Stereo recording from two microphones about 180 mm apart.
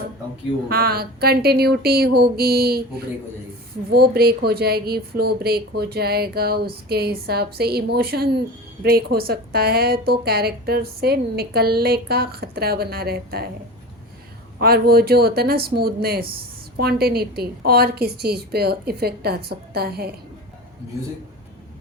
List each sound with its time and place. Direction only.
0.7 s speech: 60° right (ahead or behind)
14.6 s speech: 60° right (ahead or behind)